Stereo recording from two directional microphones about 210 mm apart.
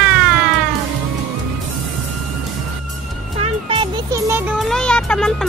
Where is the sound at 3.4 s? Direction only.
25° right (ahead or behind).